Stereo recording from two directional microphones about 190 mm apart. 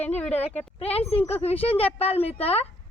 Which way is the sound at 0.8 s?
30° left (ahead or behind).